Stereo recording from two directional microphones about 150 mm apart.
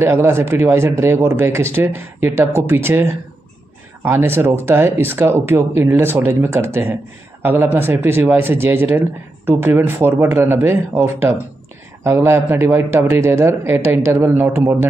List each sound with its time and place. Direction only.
0.0 s speech: 15° right (ahead or behind)